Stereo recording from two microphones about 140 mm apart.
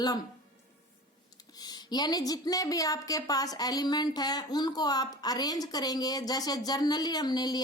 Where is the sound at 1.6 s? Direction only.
30° left (ahead or behind).